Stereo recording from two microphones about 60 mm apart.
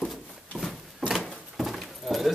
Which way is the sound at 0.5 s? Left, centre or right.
Centre.